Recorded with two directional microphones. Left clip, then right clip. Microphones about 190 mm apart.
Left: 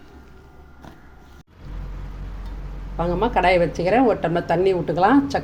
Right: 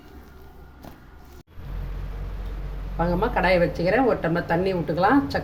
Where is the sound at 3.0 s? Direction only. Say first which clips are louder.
Left 3 dB; 40° left (ahead or behind).